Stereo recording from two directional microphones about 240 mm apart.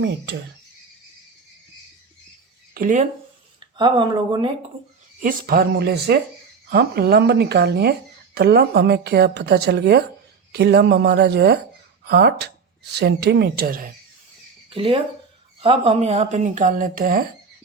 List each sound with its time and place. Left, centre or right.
2.7 s speech: right
3.6 s speech: centre
5.2 s a woman's voice: right
14.7 s speech: right